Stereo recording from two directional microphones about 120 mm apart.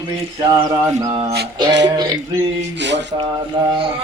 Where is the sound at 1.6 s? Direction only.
35° right (ahead or behind).